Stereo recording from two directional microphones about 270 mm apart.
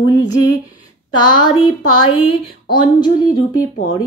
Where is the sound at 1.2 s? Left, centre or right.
Centre.